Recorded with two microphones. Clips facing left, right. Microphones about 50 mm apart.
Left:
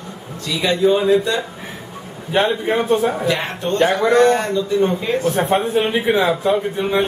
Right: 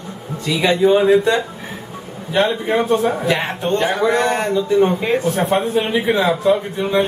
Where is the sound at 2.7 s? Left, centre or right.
Centre.